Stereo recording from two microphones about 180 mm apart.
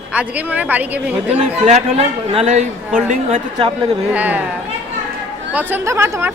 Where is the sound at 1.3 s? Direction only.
40° right (ahead or behind).